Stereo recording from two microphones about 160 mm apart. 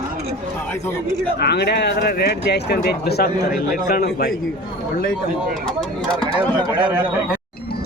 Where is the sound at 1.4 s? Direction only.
90° left.